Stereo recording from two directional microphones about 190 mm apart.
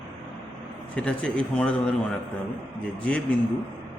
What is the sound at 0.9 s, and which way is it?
Speech, 5° left (ahead or behind).